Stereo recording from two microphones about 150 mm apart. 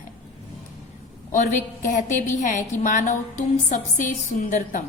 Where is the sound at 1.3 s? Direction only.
55° left (ahead or behind).